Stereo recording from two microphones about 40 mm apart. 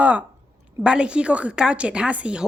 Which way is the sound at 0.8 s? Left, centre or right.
Right.